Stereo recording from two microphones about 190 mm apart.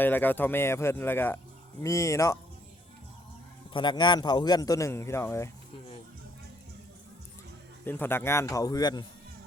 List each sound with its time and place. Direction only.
0.0 s speech: 10° left (ahead or behind)
3.7 s a man's voice: 25° left (ahead or behind)
7.9 s speech: 10° left (ahead or behind)